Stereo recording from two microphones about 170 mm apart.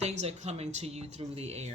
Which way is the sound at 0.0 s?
40° right (ahead or behind).